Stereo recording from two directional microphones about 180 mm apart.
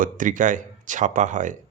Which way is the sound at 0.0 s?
45° right (ahead or behind).